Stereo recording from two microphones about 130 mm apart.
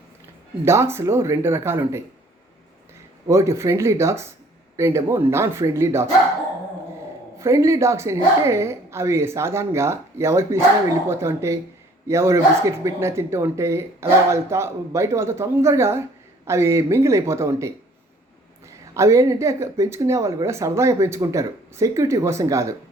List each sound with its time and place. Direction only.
0.6 s a woman's voice: 20° right (ahead or behind)
3.2 s a woman's voice: 20° right (ahead or behind)
7.3 s a woman's voice: 20° right (ahead or behind)
18.9 s a woman's voice: 20° right (ahead or behind)